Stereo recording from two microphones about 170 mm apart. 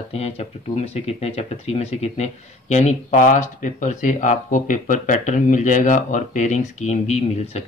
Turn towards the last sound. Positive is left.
turn(degrees=40)  # may be behind; listen again after turning